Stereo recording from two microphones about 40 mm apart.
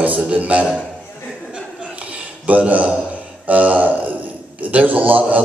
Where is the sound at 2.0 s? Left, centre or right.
Right.